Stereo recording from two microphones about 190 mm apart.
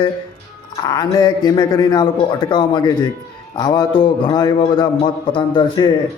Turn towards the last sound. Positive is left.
turn(degrees=25)  # may be behind; listen again after turning